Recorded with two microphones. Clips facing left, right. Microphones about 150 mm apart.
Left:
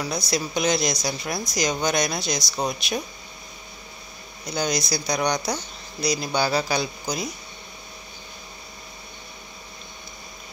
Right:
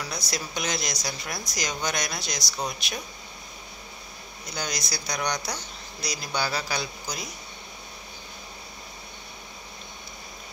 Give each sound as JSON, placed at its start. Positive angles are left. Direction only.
{"t": 0.0, "sound": "speech", "side_deg": 20}
{"t": 4.6, "sound": "speech", "side_deg": 20}